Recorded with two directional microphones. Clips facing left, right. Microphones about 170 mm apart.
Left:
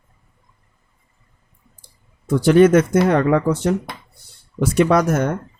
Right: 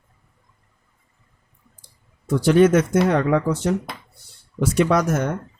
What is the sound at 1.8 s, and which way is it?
Speech, 55° left (ahead or behind).